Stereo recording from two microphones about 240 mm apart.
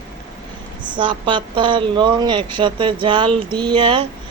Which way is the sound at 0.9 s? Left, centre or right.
Centre.